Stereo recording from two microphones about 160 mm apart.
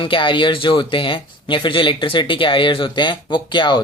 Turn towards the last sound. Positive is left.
turn(degrees=30)  # may be behind; listen again after turning